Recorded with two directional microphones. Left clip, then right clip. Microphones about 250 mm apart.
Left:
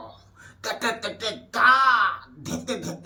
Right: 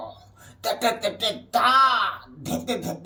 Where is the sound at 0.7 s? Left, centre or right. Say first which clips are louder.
Right 4 dB; centre.